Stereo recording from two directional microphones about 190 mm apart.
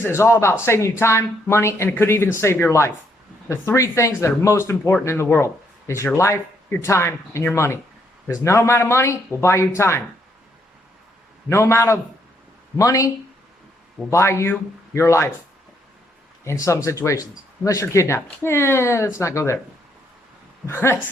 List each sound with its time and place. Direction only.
0.0 s speech: 15° left (ahead or behind)
11.4 s speech: 15° left (ahead or behind)
14.1 s speech: 15° left (ahead or behind)
16.4 s speech: 15° left (ahead or behind)
20.7 s speech: 15° left (ahead or behind)